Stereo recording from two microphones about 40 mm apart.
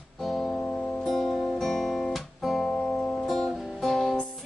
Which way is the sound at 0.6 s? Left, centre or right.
Left.